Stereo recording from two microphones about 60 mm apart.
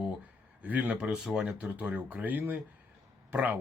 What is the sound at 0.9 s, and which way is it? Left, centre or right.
Speech, centre.